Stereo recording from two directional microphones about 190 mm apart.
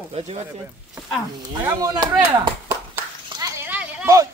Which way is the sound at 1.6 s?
20° right (ahead or behind).